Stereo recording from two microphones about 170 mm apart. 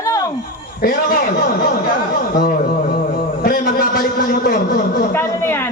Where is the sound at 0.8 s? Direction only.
60° left (ahead or behind).